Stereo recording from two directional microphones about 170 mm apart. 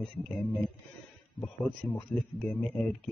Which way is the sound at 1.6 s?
5° left (ahead or behind).